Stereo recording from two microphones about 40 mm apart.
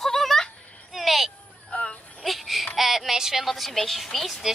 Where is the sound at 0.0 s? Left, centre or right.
Centre.